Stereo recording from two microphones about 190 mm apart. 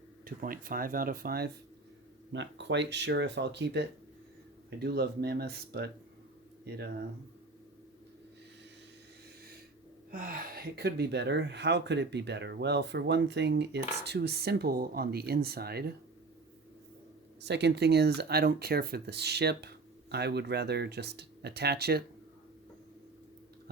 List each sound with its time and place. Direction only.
0.3 s speech: 50° right (ahead or behind)
2.3 s speech: 70° right (ahead or behind)
10.1 s speech: 45° right (ahead or behind)
17.4 s speech: 65° right (ahead or behind)